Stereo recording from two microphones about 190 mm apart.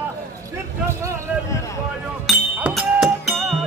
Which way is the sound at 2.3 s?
5° right (ahead or behind).